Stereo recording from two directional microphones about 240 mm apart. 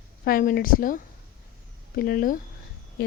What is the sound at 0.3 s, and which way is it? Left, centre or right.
Speech, left.